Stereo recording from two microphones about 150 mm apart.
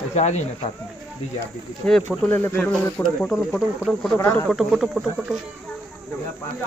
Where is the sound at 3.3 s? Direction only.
5° right (ahead or behind).